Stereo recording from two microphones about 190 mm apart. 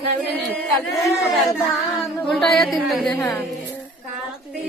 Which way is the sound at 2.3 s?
Centre (ahead or behind).